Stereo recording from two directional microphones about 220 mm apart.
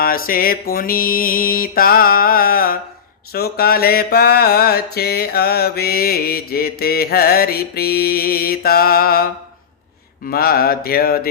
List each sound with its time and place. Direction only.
0.0 s mantra: 40° left (ahead or behind)
10.2 s mantra: 45° left (ahead or behind)